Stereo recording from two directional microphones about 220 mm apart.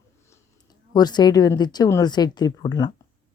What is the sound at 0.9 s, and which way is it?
Speech, 20° left (ahead or behind).